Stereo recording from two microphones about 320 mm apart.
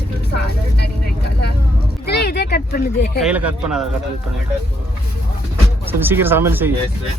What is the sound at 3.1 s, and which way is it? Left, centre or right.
Speech, centre.